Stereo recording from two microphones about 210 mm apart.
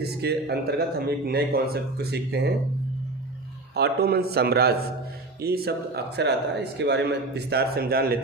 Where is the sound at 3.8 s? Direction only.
50° right (ahead or behind).